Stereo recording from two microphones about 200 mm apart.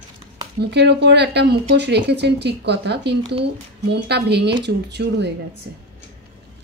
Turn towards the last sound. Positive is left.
turn(degrees=-55)  # may be behind; listen again after turning